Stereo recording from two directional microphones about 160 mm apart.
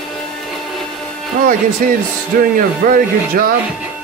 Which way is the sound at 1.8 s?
60° right (ahead or behind).